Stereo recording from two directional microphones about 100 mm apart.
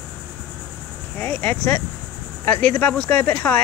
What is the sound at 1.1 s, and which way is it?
Speech, 15° left (ahead or behind).